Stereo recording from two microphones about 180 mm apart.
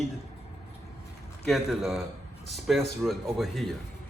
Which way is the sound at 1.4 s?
Centre (ahead or behind).